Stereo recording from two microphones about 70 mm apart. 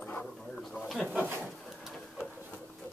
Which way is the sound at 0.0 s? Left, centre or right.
Centre.